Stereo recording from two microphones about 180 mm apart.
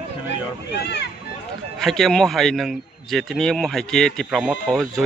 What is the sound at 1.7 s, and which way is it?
A man's voice, centre (ahead or behind).